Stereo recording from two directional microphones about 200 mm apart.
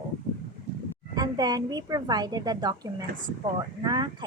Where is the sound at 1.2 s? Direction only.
20° right (ahead or behind).